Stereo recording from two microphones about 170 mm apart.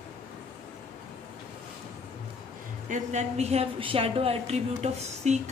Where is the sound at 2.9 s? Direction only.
45° right (ahead or behind).